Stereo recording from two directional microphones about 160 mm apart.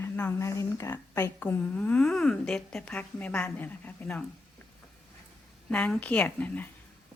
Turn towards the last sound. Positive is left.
turn(degrees=10)  # may be behind; listen again after turning